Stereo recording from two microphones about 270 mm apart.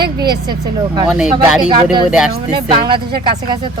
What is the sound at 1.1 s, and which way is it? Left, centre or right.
Speech, centre.